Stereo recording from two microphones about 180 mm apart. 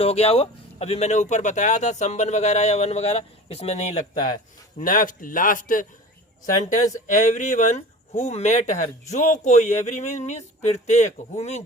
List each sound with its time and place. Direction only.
0.0 s speech: 35° left (ahead or behind)
4.8 s speech: 50° left (ahead or behind)
7.1 s speech: 45° left (ahead or behind)